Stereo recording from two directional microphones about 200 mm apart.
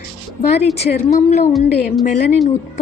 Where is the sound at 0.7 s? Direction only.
35° left (ahead or behind).